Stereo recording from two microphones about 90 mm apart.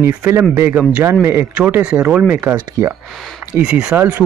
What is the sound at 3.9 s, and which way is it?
Speech, 20° right (ahead or behind).